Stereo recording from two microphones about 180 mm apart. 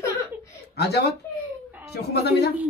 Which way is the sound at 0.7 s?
65° left (ahead or behind).